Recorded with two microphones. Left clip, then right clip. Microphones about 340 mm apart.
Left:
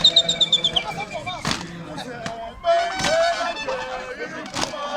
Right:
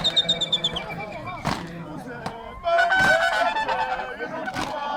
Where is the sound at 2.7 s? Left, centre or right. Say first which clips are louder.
Right 2 dB; right.